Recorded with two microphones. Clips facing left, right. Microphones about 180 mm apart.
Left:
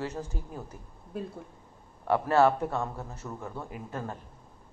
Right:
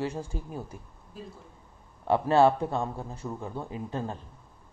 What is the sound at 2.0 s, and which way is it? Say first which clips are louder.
Speech: right 2 dB; 20° right (ahead or behind).